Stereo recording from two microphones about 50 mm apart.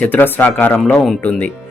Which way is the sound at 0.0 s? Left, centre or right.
Left.